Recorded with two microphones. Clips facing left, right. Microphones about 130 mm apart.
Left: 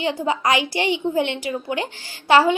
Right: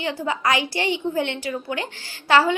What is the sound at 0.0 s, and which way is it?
A woman's voice, 20° left (ahead or behind).